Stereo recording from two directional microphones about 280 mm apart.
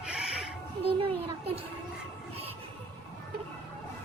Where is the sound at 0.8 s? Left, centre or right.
Centre.